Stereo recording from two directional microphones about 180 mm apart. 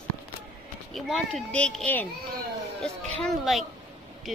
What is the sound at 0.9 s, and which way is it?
Speech, centre (ahead or behind).